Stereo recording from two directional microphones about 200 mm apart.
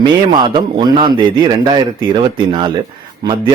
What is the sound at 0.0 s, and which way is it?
A man's voice, 20° right (ahead or behind).